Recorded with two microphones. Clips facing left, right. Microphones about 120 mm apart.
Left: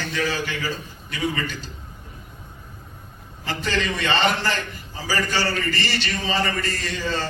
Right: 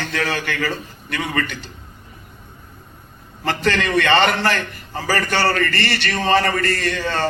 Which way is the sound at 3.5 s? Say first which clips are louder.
Right 5 dB; 65° right (ahead or behind).